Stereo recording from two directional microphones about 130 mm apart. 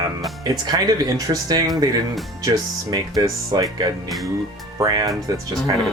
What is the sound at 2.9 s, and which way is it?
Speech, 30° right (ahead or behind).